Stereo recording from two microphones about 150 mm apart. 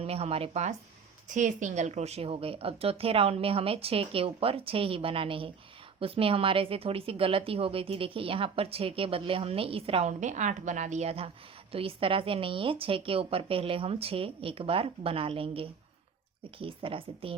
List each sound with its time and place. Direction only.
0.0 s speech: 40° right (ahead or behind)
1.3 s a woman's voice: 60° right (ahead or behind); by 10.1 s 40° right (ahead or behind)
10.1 s a woman's voice: 55° right (ahead or behind); by 17.3 s 35° right (ahead or behind)